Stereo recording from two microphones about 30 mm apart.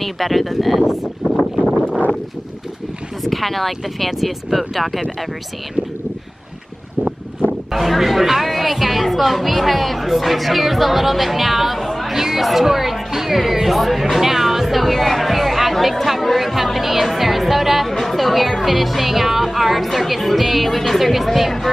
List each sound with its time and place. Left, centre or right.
0.0 s speech: centre
0.8 s speech: centre
3.3 s speech: centre
7.4 s a sound: left
7.7 s speech: centre
11.8 s chatter: centre
12.1 s chatter: centre
12.4 s speech: centre
17.1 s music: centre
17.9 s speech: centre